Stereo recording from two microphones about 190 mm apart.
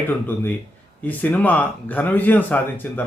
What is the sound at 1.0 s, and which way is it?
Speech, 10° left (ahead or behind).